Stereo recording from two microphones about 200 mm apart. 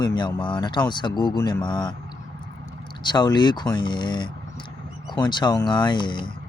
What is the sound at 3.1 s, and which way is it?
Speech, 20° left (ahead or behind).